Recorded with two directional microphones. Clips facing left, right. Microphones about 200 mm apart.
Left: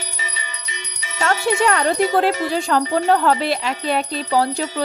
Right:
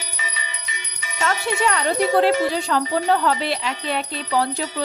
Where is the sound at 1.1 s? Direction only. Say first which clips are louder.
Left 4 dB; 45° left (ahead or behind).